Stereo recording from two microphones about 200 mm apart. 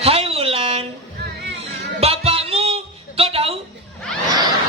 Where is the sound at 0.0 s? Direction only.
30° right (ahead or behind).